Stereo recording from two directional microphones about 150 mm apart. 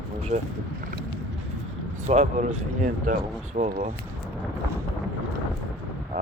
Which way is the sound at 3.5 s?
50° right (ahead or behind).